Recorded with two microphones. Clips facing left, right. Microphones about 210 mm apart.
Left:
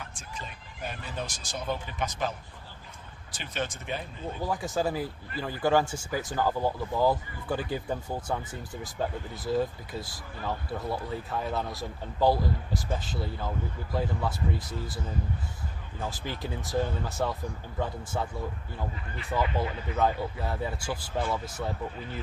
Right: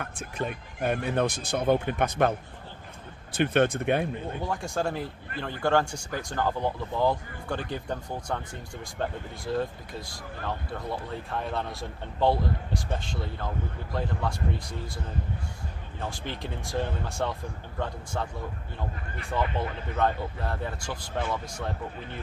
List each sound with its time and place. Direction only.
0.0 s speech: 60° right (ahead or behind)
3.3 s speech: 60° right (ahead or behind)
4.4 s speech: 5° left (ahead or behind)
19.3 s speech: 5° left (ahead or behind)